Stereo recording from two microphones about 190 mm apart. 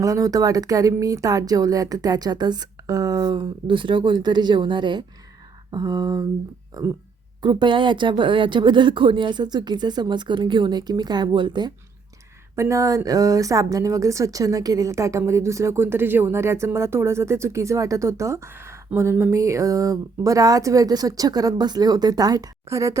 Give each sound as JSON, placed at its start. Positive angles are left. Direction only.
{"t": 0.0, "sound": "speech", "side_deg": -20}